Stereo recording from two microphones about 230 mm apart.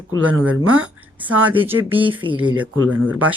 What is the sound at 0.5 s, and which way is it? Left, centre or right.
Speech, right.